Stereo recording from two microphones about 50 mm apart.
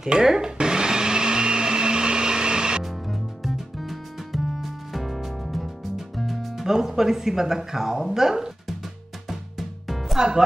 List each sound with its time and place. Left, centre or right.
0.0 s blender: centre
2.8 s music: centre